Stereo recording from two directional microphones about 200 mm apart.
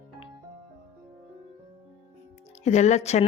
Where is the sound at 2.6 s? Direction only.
35° left (ahead or behind).